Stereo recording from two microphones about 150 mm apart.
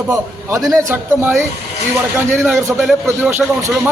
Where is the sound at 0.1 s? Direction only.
20° right (ahead or behind).